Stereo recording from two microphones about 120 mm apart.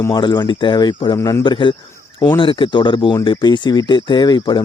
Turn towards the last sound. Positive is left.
turn(degrees=35)  # may be behind; listen again after turning